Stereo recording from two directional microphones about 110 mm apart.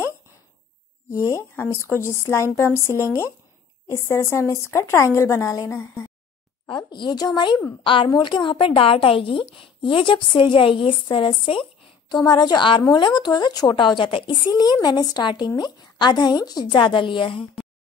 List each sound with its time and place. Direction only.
1.1 s a woman's voice: 25° left (ahead or behind)
3.8 s a woman's voice: 25° left (ahead or behind)
6.9 s a woman's voice: 40° left (ahead or behind)